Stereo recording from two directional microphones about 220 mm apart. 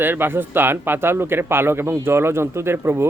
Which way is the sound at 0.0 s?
10° right (ahead or behind).